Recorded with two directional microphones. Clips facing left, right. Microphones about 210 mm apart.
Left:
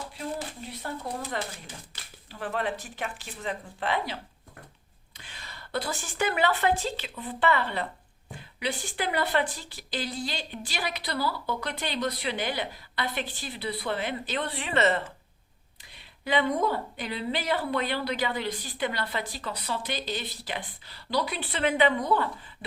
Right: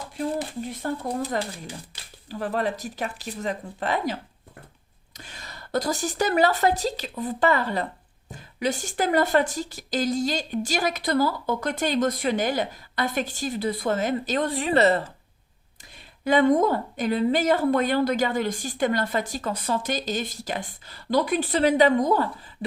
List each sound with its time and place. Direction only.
0.7 s a woman's voice: 40° right (ahead or behind)
16.2 s a woman's voice: 45° right (ahead or behind)